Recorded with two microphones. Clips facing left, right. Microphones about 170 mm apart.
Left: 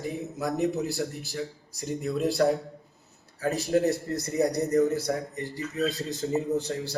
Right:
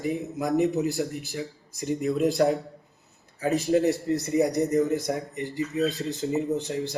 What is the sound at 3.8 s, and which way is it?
A man's voice, 20° right (ahead or behind).